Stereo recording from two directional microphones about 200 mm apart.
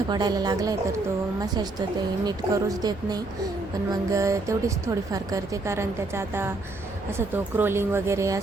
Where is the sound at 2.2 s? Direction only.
20° right (ahead or behind).